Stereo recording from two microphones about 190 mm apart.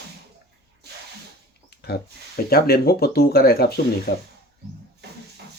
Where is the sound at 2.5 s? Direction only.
55° left (ahead or behind).